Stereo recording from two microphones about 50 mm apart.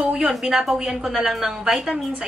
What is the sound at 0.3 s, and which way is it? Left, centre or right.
A woman's voice, centre.